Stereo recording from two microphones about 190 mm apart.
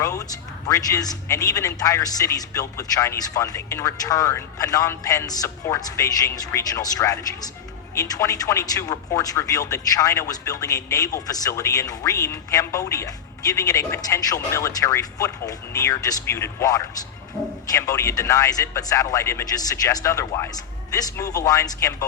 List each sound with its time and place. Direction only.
0.0 s a man's voice: 20° left (ahead or behind)